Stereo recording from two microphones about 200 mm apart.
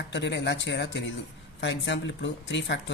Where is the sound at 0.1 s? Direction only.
60° left (ahead or behind).